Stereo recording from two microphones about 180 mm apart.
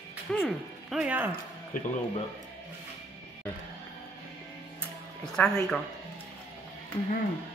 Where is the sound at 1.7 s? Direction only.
50° left (ahead or behind).